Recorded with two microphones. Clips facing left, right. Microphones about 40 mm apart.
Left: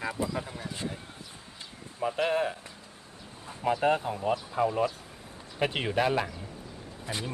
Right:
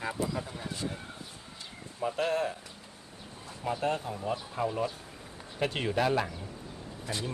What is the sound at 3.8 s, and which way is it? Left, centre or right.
Speech, left.